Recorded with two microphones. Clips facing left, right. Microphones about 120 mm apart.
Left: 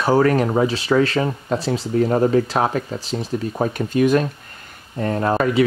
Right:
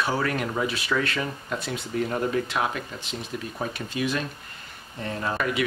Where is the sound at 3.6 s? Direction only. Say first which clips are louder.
Left 11 dB; 45° left (ahead or behind).